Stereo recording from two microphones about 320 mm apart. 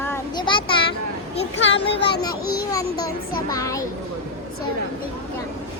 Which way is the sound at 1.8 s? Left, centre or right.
Left.